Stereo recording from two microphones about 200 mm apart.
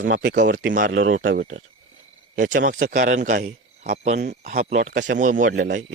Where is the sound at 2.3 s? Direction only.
40° right (ahead or behind).